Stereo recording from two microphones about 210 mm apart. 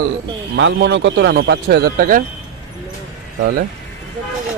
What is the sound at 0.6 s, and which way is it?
Speech, 60° right (ahead or behind).